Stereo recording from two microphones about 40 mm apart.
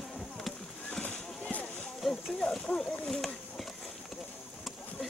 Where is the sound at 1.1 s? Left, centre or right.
Left.